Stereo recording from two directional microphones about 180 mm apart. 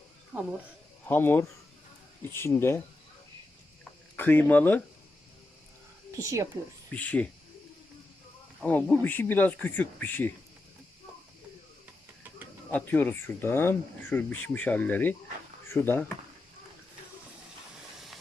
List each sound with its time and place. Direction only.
1.0 s speech: 10° left (ahead or behind)
4.2 s speech: 10° left (ahead or behind)
6.1 s speech: 15° right (ahead or behind)
6.9 s speech: 10° left (ahead or behind)
8.6 s speech: 10° left (ahead or behind)
12.7 s speech: 10° left (ahead or behind)